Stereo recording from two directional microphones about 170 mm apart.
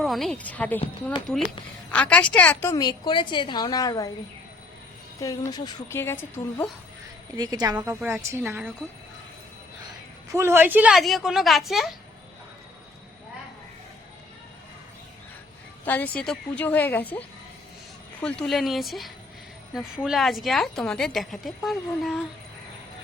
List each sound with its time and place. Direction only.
0.0 s a woman's voice: centre (ahead or behind)
1.9 s a woman's voice: 5° left (ahead or behind)
5.2 s a woman's voice: 20° left (ahead or behind)
7.3 s a woman's voice: 25° right (ahead or behind)
7.8 s a woman's voice: 10° right (ahead or behind)
10.3 s a woman's voice: 15° right (ahead or behind)
15.8 s a woman's voice: 10° left (ahead or behind)